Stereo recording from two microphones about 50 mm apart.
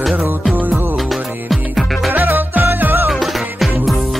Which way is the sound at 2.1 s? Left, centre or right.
Right.